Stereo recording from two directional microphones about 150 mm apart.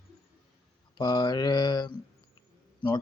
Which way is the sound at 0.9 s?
30° left (ahead or behind).